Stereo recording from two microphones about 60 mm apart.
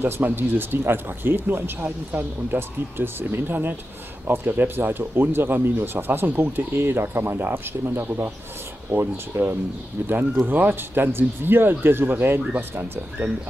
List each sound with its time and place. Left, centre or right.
0.0 s speech: right